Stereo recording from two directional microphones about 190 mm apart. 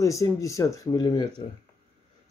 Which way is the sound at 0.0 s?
15° left (ahead or behind).